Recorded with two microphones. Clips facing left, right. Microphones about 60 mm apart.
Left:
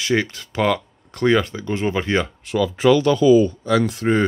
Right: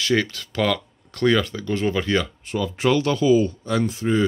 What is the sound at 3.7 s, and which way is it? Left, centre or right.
Speech, left.